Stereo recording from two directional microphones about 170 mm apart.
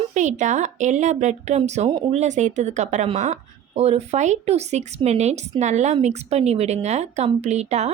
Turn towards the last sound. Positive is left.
turn(degrees=-40)  # may be behind; listen again after turning